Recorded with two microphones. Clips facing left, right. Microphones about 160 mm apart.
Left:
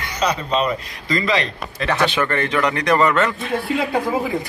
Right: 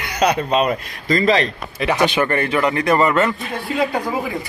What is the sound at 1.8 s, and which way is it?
A man's voice, 15° right (ahead or behind).